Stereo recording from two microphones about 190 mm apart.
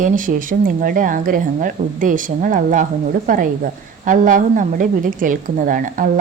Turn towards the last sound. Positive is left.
turn(degrees=-45)  # may be behind; listen again after turning